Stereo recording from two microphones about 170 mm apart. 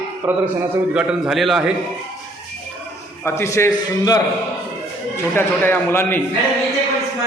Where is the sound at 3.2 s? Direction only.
15° left (ahead or behind).